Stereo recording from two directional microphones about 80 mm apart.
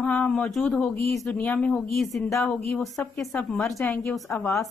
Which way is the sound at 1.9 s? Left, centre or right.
Centre.